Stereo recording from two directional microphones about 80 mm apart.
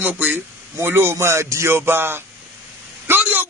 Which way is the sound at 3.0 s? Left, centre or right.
Right.